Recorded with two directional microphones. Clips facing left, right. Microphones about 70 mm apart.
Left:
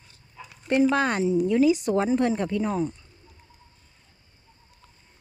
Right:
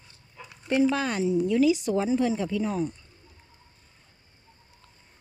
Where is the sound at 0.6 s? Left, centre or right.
Left.